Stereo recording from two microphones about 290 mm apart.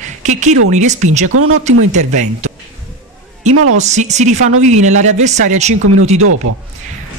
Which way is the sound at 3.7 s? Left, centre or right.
Right.